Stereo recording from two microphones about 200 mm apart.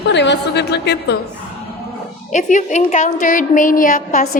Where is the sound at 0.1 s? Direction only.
60° left (ahead or behind).